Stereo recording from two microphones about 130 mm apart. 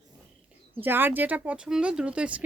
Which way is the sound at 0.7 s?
15° right (ahead or behind).